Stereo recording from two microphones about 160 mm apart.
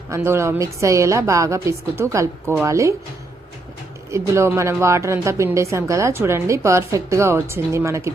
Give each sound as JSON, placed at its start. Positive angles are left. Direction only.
{"t": 0.1, "sound": "a woman's voice", "side_deg": -15}
{"t": 4.4, "sound": "speech", "side_deg": -15}